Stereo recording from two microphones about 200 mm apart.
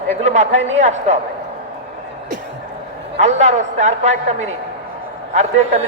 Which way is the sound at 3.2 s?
35° right (ahead or behind).